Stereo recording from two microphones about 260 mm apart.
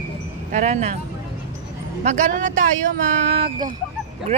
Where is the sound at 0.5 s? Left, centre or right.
Right.